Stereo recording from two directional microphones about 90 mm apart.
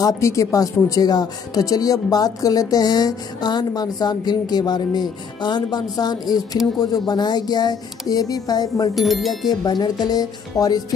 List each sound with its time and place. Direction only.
0.0 s a woman's voice: 35° left (ahead or behind)
8.9 s speech: centre (ahead or behind)
9.7 s a woman's voice: 50° left (ahead or behind)